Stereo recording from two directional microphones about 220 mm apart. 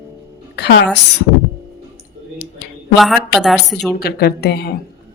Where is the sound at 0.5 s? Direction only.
50° left (ahead or behind).